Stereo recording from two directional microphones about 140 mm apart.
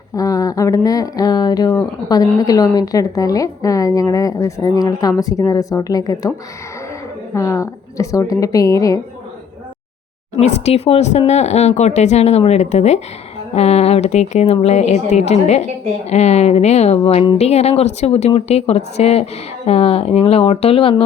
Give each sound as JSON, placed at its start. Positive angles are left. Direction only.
{"t": 0.2, "sound": "a woman's voice", "side_deg": 25}
{"t": 7.3, "sound": "a woman's voice", "side_deg": 20}
{"t": 10.4, "sound": "a woman's voice", "side_deg": 50}